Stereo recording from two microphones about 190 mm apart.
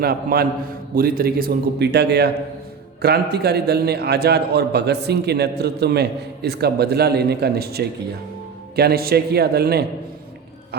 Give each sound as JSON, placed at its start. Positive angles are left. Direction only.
{"t": 0.0, "sound": "a man's voice", "side_deg": -55}